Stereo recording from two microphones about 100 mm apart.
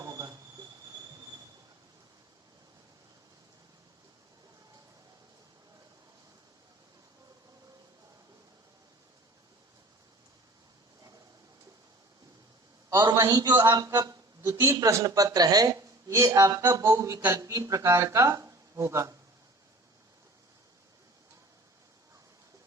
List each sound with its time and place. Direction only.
0.0 s a sound: 35° right (ahead or behind)
13.0 s a man's voice: 35° right (ahead or behind)
13.7 s a man's voice: 40° right (ahead or behind)